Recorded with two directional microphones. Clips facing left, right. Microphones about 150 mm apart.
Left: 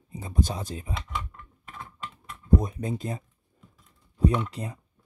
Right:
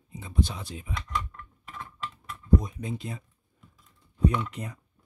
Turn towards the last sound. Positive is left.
turn(degrees=30)  # may be behind; listen again after turning